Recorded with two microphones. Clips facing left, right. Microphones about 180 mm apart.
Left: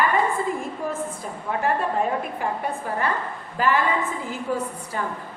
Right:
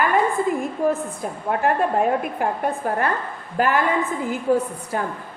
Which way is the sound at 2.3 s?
55° right (ahead or behind).